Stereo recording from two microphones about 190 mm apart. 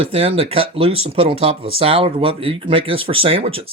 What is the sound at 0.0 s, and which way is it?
Speech, 30° right (ahead or behind).